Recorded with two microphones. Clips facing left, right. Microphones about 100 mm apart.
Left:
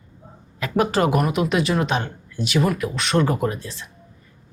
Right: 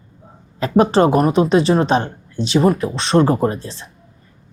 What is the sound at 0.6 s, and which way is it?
Speech, 30° right (ahead or behind).